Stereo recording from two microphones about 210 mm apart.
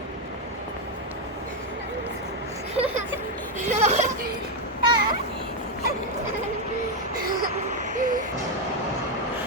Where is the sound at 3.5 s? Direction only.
35° right (ahead or behind).